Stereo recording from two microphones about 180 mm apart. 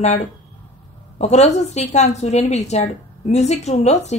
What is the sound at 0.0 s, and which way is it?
Speech, 40° left (ahead or behind).